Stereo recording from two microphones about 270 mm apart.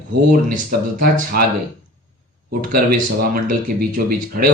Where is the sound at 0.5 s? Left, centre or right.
Right.